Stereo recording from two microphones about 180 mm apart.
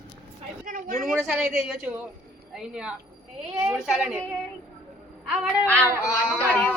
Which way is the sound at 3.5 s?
5° right (ahead or behind).